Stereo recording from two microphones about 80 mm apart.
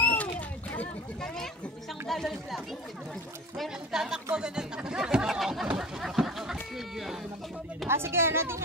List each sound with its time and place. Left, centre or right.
0.0 s a sound: centre
1.2 s speech: centre
7.9 s a woman's voice: right